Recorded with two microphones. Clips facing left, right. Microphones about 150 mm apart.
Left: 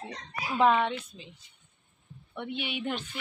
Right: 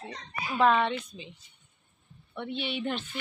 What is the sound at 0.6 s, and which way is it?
Speech, 10° left (ahead or behind).